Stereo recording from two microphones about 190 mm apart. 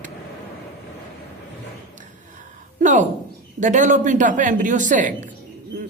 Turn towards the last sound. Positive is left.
turn(degrees=-40)  # may be behind; listen again after turning